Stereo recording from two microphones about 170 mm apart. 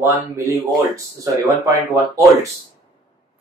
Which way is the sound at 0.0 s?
15° right (ahead or behind).